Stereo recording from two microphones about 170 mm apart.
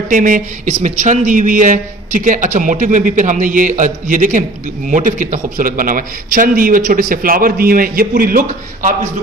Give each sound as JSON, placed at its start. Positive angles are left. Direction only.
{"t": 0.1, "sound": "a man's voice", "side_deg": -50}